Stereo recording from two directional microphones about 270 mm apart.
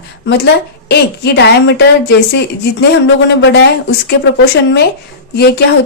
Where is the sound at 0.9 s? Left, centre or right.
Left.